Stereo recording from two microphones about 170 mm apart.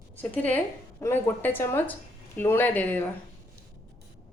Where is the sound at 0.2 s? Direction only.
10° left (ahead or behind).